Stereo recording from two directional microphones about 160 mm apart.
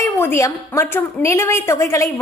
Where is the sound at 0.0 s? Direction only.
15° left (ahead or behind).